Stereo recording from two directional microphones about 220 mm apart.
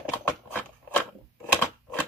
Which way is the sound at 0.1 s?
10° left (ahead or behind).